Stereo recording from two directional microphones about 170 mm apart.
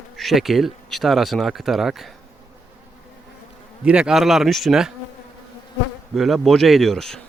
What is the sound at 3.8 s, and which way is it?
Speech, 5° right (ahead or behind).